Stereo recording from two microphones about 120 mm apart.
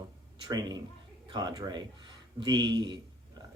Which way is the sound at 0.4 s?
35° right (ahead or behind).